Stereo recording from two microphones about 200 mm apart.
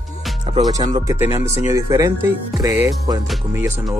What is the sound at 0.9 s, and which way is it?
Speech, 15° right (ahead or behind).